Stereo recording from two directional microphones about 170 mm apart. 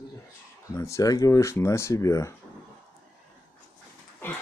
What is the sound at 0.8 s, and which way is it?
Speech, 15° left (ahead or behind).